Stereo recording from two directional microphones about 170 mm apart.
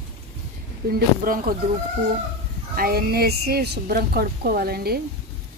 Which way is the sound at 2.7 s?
60° right (ahead or behind).